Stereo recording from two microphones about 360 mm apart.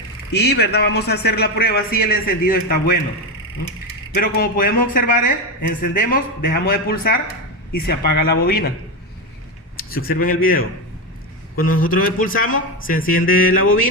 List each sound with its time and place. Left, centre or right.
0.3 s speech: left
4.1 s speech: left
9.7 s speech: left